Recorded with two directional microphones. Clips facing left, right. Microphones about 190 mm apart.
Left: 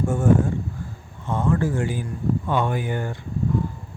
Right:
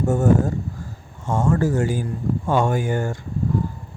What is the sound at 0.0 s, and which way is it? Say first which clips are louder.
Speech: right 2 dB; 40° right (ahead or behind).